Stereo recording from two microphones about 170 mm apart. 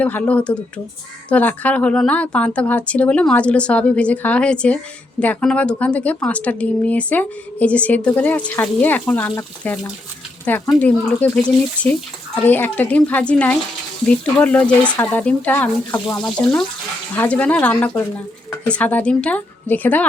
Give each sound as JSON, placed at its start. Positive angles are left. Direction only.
{"t": 0.0, "sound": "a woman's voice", "side_deg": 10}
{"t": 12.5, "sound": "a woman's voice", "side_deg": 10}